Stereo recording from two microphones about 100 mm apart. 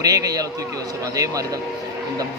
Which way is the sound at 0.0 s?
35° right (ahead or behind).